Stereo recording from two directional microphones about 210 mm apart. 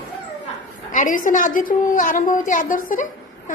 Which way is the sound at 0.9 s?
40° left (ahead or behind).